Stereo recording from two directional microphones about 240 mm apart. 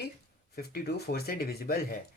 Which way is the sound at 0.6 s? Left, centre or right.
Left.